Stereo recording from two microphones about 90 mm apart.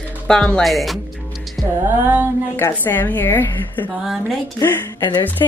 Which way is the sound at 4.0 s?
5° right (ahead or behind).